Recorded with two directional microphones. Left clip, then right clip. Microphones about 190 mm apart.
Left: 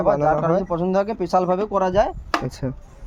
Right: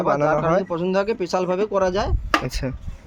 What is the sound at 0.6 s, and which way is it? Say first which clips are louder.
Speech: left 1 dB; 50° left (ahead or behind).